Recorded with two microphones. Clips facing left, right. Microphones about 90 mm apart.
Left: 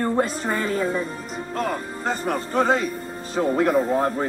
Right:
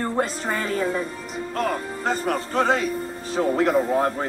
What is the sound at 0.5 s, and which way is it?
A woman's voice, 30° left (ahead or behind).